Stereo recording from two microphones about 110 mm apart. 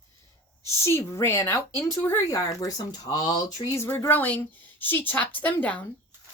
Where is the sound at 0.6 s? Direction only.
25° left (ahead or behind).